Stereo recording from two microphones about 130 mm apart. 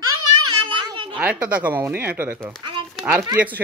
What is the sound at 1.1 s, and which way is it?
Speech, 10° right (ahead or behind).